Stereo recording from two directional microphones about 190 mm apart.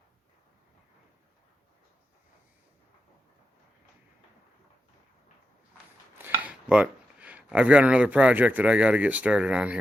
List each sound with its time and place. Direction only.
6.1 s cutlery: 10° right (ahead or behind)